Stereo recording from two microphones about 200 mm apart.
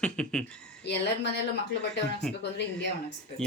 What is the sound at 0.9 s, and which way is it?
Speech, 60° left (ahead or behind).